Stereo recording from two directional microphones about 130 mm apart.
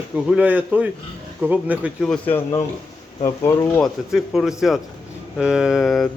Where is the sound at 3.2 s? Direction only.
20° left (ahead or behind).